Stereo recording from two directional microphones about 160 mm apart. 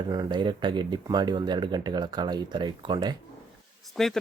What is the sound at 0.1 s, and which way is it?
Speech, 30° right (ahead or behind).